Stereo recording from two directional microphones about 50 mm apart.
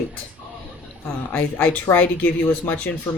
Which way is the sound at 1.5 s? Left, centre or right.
Left.